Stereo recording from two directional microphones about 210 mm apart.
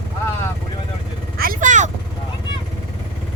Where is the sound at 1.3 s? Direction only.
45° right (ahead or behind).